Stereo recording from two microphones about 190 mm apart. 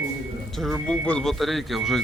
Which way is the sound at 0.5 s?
Centre (ahead or behind).